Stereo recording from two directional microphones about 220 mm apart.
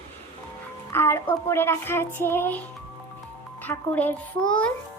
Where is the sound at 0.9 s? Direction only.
10° left (ahead or behind).